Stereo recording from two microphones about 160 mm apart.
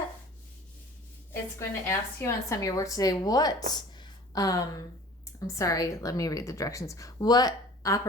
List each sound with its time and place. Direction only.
1.3 s a woman's voice: 15° left (ahead or behind)